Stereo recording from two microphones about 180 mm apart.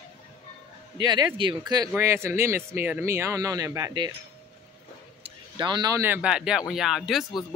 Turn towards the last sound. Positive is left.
turn(degrees=0)  # may be behind; listen again after turning